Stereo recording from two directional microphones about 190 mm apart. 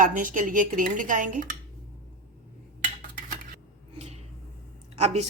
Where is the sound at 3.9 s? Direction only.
35° right (ahead or behind).